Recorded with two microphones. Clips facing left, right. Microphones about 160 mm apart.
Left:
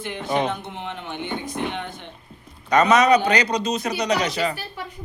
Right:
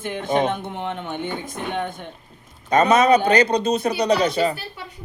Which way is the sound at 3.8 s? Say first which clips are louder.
Right 4 dB; 30° right (ahead or behind).